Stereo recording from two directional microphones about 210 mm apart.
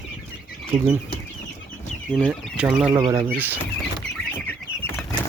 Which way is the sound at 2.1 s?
Centre (ahead or behind).